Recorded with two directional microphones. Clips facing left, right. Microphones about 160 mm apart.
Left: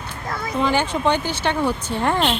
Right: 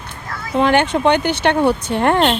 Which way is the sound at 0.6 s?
70° right (ahead or behind).